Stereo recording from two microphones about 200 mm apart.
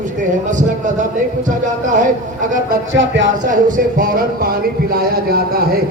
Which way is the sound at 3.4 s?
40° right (ahead or behind).